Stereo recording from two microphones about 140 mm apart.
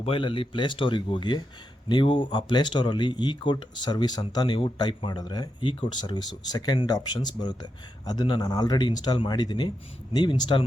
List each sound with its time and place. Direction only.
0.0 s speech: 40° left (ahead or behind)